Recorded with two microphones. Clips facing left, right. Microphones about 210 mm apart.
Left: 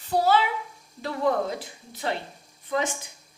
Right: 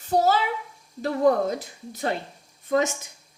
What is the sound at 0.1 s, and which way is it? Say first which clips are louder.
A child's voice: right 1 dB; 45° right (ahead or behind).